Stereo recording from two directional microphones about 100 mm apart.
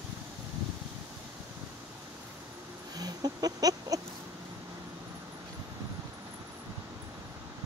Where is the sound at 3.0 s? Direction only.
40° right (ahead or behind).